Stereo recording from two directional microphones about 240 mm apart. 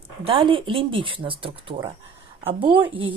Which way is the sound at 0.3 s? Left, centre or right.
Right.